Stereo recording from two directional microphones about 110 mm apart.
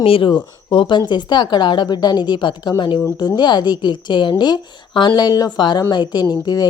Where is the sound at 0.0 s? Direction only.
55° left (ahead or behind).